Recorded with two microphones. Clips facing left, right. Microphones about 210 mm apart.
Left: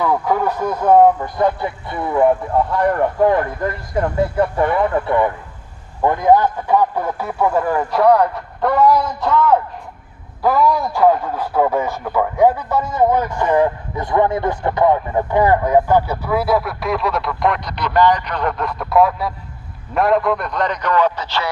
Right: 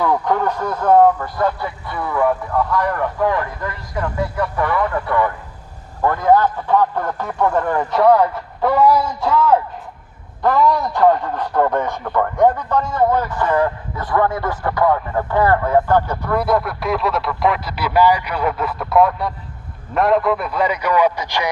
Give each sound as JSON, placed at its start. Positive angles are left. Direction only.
{"t": 0.0, "sound": "speech", "side_deg": 5}
{"t": 4.4, "sound": "a man's voice", "side_deg": 25}
{"t": 10.4, "sound": "a man's voice", "side_deg": 5}